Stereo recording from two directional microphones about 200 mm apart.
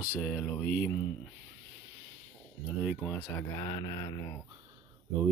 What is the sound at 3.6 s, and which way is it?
Speech, 25° left (ahead or behind).